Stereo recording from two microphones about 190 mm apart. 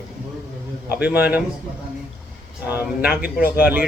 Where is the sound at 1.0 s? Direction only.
10° right (ahead or behind).